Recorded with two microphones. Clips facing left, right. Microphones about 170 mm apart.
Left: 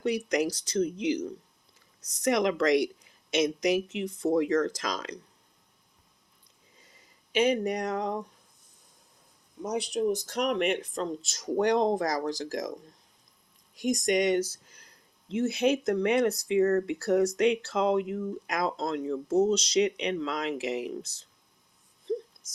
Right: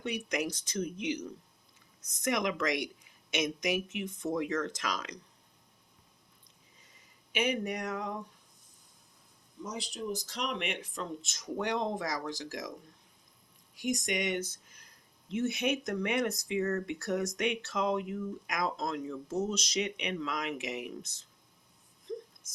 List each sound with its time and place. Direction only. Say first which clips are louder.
0.0 s speech: left 7 dB; 35° left (ahead or behind)
7.3 s speech: left 7 dB; 35° left (ahead or behind)
9.6 s speech: left 10 dB; 65° left (ahead or behind); by 12.7 s 40° left (ahead or behind)
13.7 s speech: left 7 dB; 40° left (ahead or behind)
14.7 s a sound: left 3 dB; 30° left (ahead or behind)
15.4 s speech: left 6 dB; 30° left (ahead or behind)
22.1 s a sound: left 8 dB; 30° left (ahead or behind)